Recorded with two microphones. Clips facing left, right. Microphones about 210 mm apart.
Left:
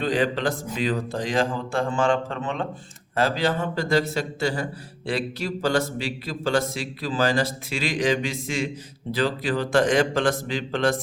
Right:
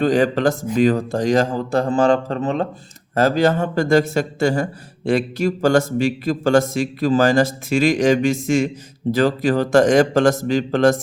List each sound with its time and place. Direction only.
0.0 s a man's voice: 45° right (ahead or behind)